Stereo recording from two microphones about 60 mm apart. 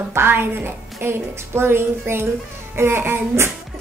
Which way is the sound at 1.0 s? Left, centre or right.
Right.